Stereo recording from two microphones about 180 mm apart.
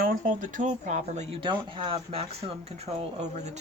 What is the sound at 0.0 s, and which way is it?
Speech, 50° right (ahead or behind).